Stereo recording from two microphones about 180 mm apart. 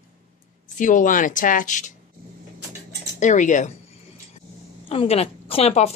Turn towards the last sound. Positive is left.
turn(degrees=35)  # may be behind; listen again after turning